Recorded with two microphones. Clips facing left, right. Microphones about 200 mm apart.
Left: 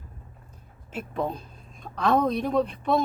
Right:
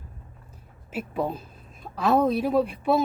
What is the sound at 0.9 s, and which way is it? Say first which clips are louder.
Speech: right 1 dB; 5° right (ahead or behind).